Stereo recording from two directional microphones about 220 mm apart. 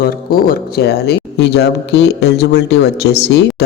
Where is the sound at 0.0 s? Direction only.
40° left (ahead or behind).